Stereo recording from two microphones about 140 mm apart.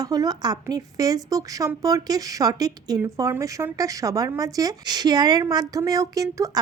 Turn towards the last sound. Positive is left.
turn(degrees=-25)  # may be behind; listen again after turning